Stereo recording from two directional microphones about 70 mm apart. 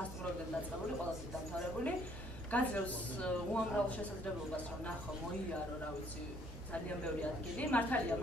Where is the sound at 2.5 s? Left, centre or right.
Centre.